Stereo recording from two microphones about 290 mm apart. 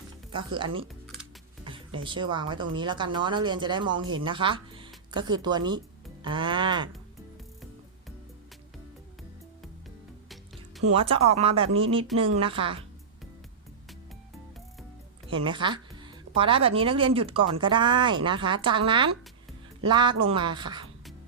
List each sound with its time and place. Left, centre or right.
0.3 s speech: centre
10.8 s speech: right
15.3 s speech: centre